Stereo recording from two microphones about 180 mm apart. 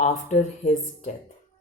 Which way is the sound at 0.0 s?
40° left (ahead or behind).